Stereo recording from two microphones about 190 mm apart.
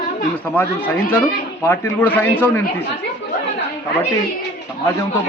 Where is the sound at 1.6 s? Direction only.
10° left (ahead or behind).